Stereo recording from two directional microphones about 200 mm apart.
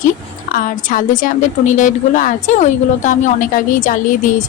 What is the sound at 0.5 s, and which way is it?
A woman's voice, 45° left (ahead or behind).